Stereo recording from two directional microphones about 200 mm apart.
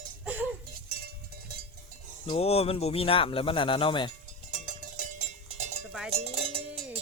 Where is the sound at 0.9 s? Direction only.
50° right (ahead or behind).